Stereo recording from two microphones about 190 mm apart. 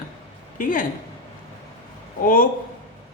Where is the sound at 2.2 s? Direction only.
45° left (ahead or behind).